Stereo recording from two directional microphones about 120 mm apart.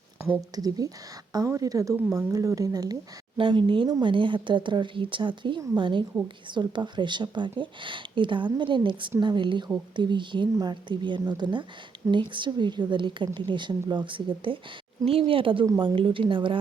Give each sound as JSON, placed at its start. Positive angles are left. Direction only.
{"t": 0.5, "sound": "a woman's voice", "side_deg": -30}
{"t": 3.3, "sound": "a woman's voice", "side_deg": -45}